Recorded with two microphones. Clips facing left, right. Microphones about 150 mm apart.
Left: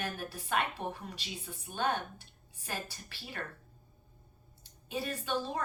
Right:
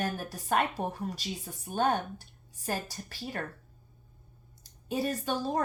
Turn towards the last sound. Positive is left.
turn(degrees=-40)  # may be behind; listen again after turning